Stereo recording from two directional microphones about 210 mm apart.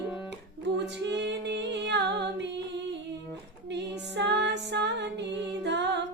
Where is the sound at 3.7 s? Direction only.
55° right (ahead or behind).